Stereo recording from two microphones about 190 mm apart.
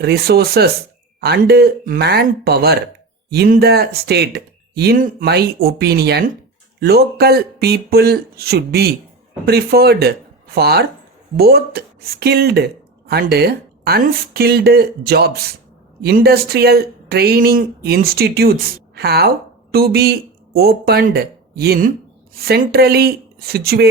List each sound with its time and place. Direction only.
0.0 s speech: 55° right (ahead or behind)